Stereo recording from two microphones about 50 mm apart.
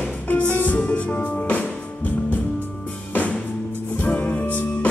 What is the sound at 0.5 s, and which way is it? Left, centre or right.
Music, left.